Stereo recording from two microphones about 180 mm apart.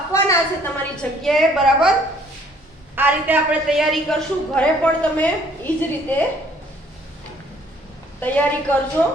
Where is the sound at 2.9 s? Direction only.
10° right (ahead or behind); by 6.2 s 10° left (ahead or behind).